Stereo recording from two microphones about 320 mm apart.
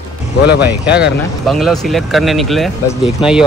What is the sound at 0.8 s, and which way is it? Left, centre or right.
Speech, left.